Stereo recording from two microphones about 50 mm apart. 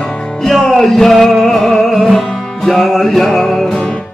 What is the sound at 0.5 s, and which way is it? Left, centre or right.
Music, centre.